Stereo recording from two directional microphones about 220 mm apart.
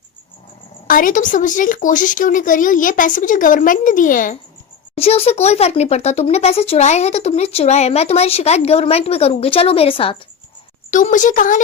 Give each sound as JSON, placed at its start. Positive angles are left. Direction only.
{"t": 0.9, "sound": "speech", "side_deg": 40}
{"t": 4.9, "sound": "speech", "side_deg": 25}
{"t": 10.9, "sound": "speech", "side_deg": 35}